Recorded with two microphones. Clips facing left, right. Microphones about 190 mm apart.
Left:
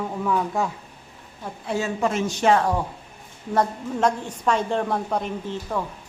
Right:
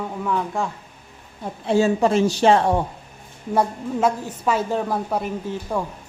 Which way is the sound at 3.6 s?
5° right (ahead or behind).